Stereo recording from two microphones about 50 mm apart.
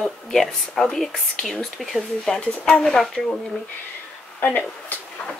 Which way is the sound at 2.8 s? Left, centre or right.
Centre.